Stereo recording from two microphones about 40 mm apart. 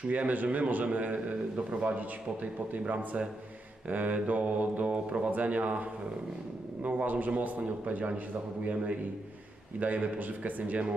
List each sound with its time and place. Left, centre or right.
0.1 s a man's voice: right